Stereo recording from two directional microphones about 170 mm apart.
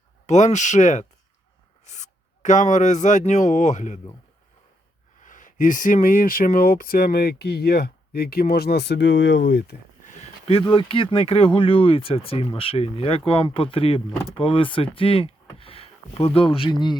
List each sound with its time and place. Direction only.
0.3 s speech: 45° left (ahead or behind)
5.2 s speech: 50° left (ahead or behind); by 9.7 s 85° left
10.0 s speech: 45° left (ahead or behind); by 17.0 s 25° left (ahead or behind)